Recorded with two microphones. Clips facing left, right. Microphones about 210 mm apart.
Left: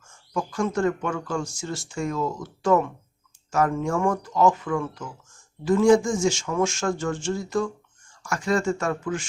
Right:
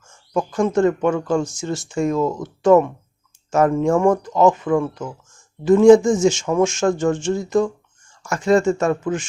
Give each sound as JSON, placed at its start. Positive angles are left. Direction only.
{"t": 0.1, "sound": "speech", "side_deg": -20}